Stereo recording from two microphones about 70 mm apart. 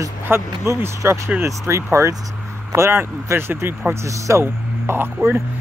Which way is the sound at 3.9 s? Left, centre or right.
Right.